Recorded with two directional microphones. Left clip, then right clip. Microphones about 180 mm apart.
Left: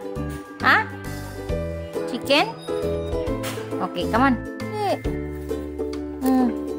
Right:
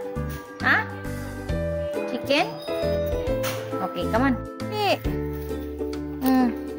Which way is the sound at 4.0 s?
25° left (ahead or behind).